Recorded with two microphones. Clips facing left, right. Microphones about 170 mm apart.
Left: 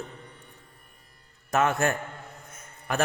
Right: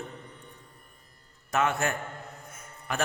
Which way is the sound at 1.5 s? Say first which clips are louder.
Left 3 dB; 50° left (ahead or behind).